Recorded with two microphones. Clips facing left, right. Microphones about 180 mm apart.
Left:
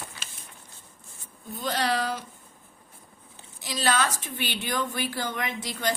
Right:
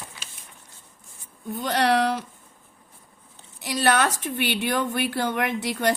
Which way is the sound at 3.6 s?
60° right (ahead or behind).